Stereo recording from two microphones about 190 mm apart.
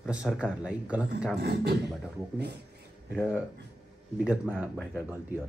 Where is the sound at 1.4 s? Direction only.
60° right (ahead or behind).